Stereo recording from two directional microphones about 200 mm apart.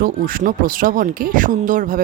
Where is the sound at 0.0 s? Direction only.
45° right (ahead or behind).